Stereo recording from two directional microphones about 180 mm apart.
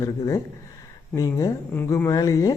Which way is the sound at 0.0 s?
20° left (ahead or behind).